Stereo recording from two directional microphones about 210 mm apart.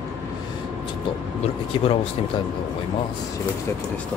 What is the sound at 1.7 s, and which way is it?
Speech, 25° left (ahead or behind).